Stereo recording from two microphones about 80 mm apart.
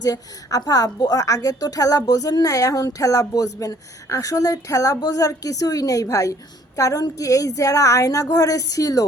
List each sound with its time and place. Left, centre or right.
0.0 s a woman's voice: left